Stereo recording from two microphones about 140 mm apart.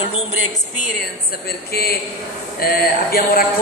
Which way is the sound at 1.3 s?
90° left.